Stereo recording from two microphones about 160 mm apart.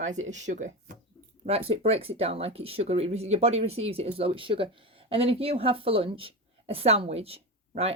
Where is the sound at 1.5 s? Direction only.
40° right (ahead or behind).